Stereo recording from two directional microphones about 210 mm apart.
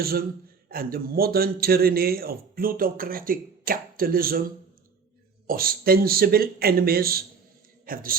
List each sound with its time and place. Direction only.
0.0 s a man's voice: 45° right (ahead or behind)
5.5 s a man's voice: 45° right (ahead or behind)